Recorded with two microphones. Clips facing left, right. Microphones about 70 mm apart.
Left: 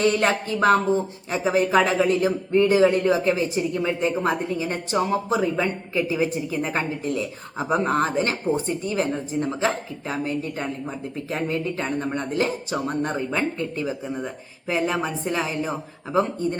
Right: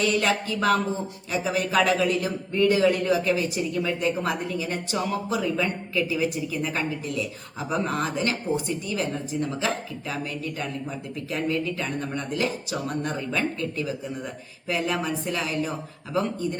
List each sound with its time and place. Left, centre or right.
0.0 s a man's voice: left